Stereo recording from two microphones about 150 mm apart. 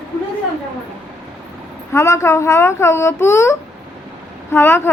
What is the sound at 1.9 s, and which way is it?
Speech, 20° left (ahead or behind).